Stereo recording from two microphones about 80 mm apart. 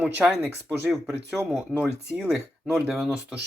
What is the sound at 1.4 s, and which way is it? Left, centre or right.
Speech, centre.